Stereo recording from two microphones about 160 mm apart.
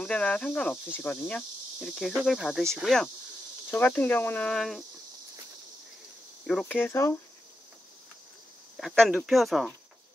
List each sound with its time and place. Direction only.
0.0 s speech: 10° left (ahead or behind)
6.6 s speech: 15° left (ahead or behind)
8.7 s speech: 5° left (ahead or behind)